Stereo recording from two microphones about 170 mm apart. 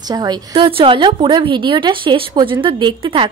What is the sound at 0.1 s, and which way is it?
A woman's voice, 25° right (ahead or behind).